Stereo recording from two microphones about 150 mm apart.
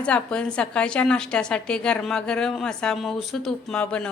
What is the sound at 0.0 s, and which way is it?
A woman's voice, 5° left (ahead or behind).